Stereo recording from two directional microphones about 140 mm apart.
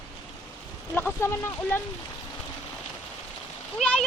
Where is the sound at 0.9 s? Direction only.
15° left (ahead or behind).